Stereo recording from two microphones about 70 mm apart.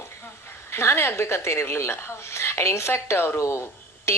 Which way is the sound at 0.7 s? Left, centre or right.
Left.